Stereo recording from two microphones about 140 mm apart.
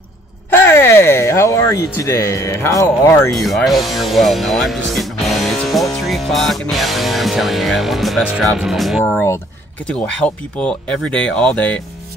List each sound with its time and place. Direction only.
0.5 s speech: 15° left (ahead or behind)
3.3 s speech: centre (ahead or behind)
9.0 s speech: 15° left (ahead or behind)